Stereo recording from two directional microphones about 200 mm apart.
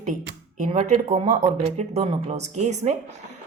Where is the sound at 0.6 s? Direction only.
35° right (ahead or behind).